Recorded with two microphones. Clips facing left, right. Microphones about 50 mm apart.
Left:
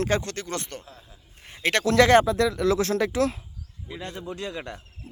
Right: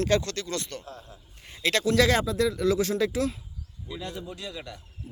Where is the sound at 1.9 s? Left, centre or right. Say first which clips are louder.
Left 8 dB; left.